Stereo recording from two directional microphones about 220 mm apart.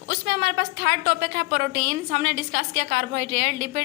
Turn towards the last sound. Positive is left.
turn(degrees=-45)  # may be behind; listen again after turning